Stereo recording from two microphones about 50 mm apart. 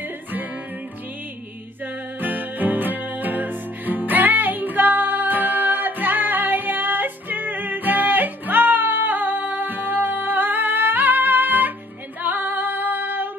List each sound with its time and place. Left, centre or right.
2.1 s music: right
12.2 s female singing: right